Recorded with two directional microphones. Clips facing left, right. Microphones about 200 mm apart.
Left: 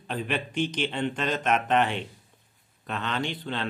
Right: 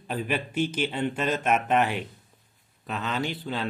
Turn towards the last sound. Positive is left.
turn(degrees=-5)  # may be behind; listen again after turning